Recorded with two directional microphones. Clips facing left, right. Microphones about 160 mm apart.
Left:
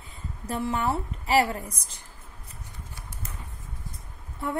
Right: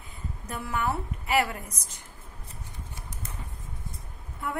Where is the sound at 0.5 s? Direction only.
30° left (ahead or behind).